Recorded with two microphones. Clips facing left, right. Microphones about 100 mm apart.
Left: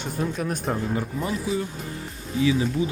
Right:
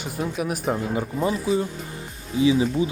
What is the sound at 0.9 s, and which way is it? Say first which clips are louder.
Speech: right 3 dB; 25° right (ahead or behind).